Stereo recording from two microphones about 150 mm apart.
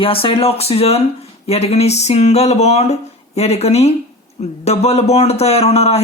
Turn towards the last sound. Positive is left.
turn(degrees=45)  # may be behind; listen again after turning